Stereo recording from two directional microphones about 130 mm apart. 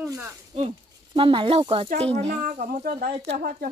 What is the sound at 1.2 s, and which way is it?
Speech, 40° right (ahead or behind).